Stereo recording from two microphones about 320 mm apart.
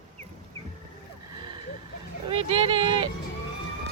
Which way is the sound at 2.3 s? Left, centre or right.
Centre.